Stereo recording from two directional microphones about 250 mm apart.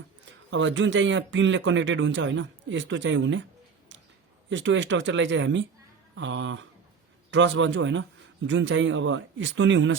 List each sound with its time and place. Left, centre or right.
0.5 s speech: right
4.4 s speech: right